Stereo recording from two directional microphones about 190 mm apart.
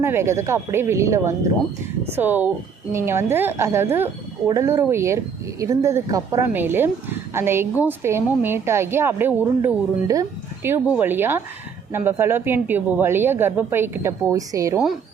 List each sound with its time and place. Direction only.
0.0 s a woman's voice: 15° right (ahead or behind)